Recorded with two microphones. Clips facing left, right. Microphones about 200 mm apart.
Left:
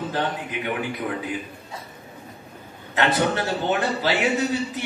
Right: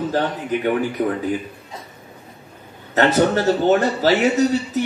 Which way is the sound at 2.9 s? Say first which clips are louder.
Right 6 dB; 40° right (ahead or behind).